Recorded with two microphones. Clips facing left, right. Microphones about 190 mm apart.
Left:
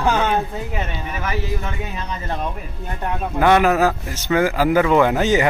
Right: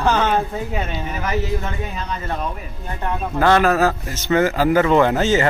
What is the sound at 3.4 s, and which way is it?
A man's voice, 15° left (ahead or behind).